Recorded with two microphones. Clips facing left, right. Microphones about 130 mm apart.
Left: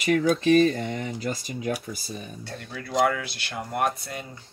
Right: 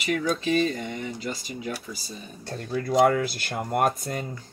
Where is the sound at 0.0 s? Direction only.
40° left (ahead or behind).